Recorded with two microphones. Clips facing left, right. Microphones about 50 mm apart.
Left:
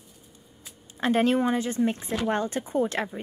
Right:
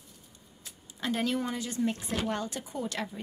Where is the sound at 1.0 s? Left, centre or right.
Left.